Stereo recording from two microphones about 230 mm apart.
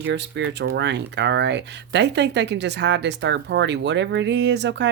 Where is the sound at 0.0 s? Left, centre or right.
Right.